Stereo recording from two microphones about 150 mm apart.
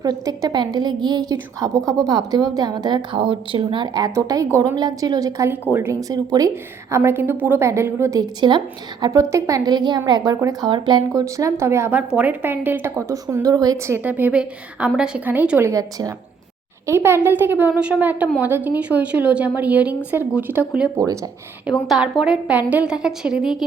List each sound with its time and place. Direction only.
0.0 s a woman's voice: 25° right (ahead or behind); by 23.6 s 5° right (ahead or behind)